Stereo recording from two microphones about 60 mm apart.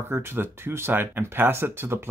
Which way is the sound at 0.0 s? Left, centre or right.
Right.